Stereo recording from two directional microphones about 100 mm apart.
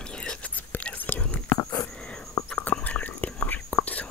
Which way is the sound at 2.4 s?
35° left (ahead or behind).